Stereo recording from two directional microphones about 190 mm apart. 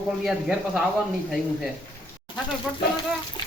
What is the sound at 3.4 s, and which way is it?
Speech, 25° left (ahead or behind).